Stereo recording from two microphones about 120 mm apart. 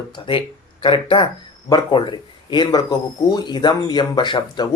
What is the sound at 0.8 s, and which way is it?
Speech, 45° left (ahead or behind).